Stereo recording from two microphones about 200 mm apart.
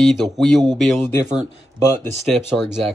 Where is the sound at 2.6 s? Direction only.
Centre (ahead or behind).